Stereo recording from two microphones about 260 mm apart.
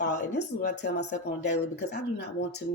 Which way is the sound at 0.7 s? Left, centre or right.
Left.